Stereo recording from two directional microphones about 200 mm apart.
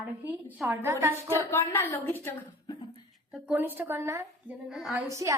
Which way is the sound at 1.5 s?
10° left (ahead or behind).